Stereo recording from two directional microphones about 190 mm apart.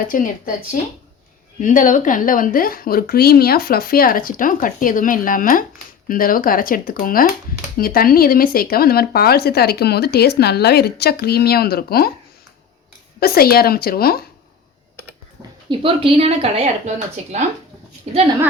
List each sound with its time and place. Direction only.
0.0 s speech: 50° left (ahead or behind)
13.1 s speech: 55° left (ahead or behind)
15.7 s a woman's voice: 30° right (ahead or behind)